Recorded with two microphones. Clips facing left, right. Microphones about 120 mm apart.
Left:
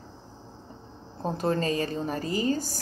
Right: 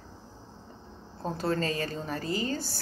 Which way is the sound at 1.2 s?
20° left (ahead or behind).